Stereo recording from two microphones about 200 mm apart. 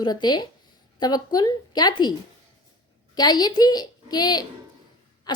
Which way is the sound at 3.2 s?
20° left (ahead or behind).